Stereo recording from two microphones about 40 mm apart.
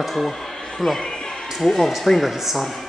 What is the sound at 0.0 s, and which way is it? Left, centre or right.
Speech, centre.